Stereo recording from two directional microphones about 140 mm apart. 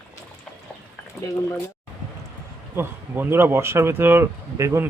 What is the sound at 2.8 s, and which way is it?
Speech, 15° right (ahead or behind).